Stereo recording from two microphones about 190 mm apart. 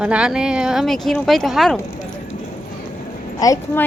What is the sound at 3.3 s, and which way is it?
Speech, 20° left (ahead or behind).